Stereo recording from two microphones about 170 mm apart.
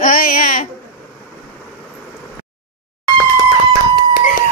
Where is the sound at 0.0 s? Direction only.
55° left (ahead or behind).